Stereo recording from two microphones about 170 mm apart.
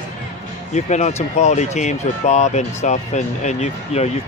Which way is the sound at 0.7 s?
40° left (ahead or behind).